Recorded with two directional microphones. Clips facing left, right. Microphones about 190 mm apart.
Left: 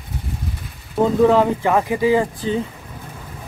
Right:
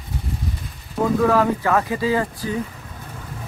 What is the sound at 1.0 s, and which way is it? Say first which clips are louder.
Speech: left 3 dB; 20° left (ahead or behind).